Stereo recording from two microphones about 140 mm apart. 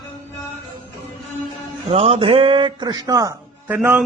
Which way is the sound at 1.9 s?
45° right (ahead or behind).